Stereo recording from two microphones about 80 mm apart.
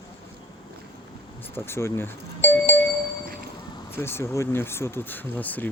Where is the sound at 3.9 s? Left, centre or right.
Left.